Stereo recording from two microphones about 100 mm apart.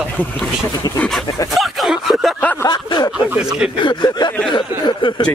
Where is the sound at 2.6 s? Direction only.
45° left (ahead or behind).